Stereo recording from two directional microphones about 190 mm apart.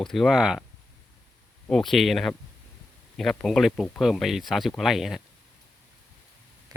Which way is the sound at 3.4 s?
Centre (ahead or behind).